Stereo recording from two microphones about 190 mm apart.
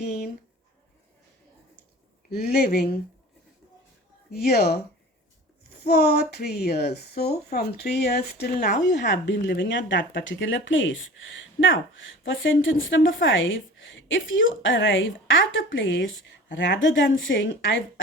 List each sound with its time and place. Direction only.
0.0 s a sound: 55° left (ahead or behind)
2.3 s a woman's voice: 55° left (ahead or behind)
4.3 s a woman's voice: 55° left (ahead or behind)
5.8 s a woman's voice: 55° left (ahead or behind); by 18.0 s 85° left